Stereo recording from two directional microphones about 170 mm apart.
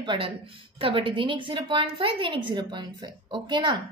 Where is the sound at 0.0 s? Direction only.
30° right (ahead or behind).